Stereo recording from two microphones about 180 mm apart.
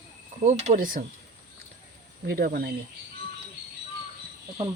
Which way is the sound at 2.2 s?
55° right (ahead or behind).